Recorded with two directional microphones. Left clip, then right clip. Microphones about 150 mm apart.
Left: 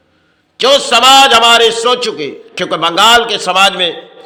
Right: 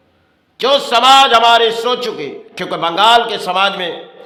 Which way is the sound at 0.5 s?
15° left (ahead or behind).